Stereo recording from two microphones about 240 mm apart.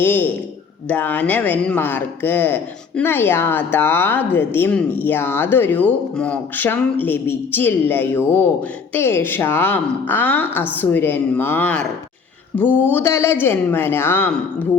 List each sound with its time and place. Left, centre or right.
0.0 s speech: centre